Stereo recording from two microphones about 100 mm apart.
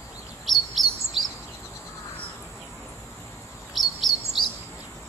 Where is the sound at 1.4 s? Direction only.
25° left (ahead or behind).